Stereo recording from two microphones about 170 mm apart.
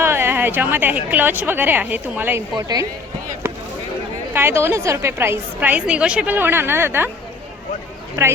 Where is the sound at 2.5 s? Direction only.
20° right (ahead or behind).